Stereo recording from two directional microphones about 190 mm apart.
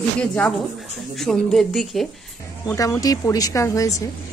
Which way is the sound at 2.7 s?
15° left (ahead or behind).